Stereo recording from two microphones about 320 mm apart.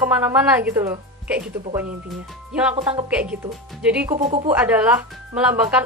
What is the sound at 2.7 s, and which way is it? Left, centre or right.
Speech, centre.